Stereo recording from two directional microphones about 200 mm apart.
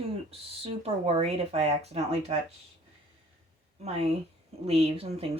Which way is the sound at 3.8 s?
30° right (ahead or behind).